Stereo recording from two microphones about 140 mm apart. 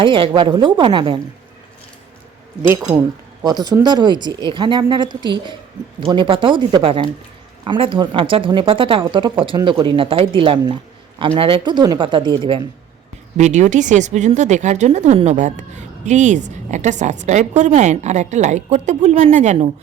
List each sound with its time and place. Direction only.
0.0 s speech: 35° right (ahead or behind)
3.4 s speech: 30° right (ahead or behind)
13.3 s speech: 60° right (ahead or behind)